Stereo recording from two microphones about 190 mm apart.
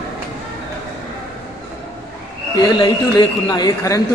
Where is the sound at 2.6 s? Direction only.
25° left (ahead or behind).